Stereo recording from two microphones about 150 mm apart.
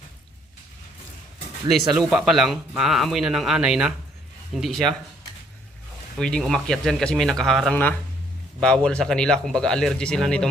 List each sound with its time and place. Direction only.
1.6 s speech: 30° right (ahead or behind)
2.0 s speech: 5° right (ahead or behind)
6.1 s speech: 5° left (ahead or behind)